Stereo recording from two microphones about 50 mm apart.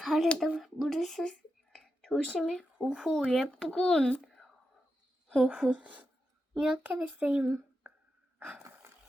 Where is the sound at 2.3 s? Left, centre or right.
Centre.